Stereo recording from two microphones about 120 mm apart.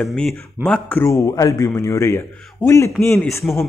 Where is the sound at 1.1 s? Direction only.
30° left (ahead or behind).